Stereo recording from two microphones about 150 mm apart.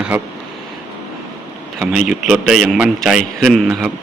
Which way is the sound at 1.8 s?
5° right (ahead or behind).